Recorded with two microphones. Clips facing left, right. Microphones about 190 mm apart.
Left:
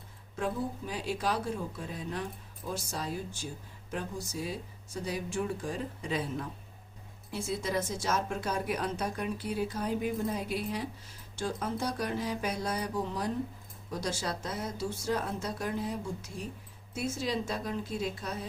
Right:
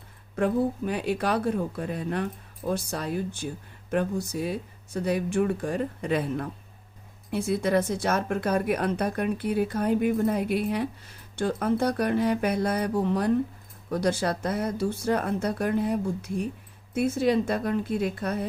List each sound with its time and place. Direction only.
0.3 s speech: 60° right (ahead or behind)